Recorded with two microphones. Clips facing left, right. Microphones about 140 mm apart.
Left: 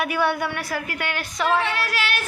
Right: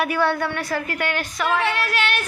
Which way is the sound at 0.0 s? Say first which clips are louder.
Right 2 dB; 15° left (ahead or behind).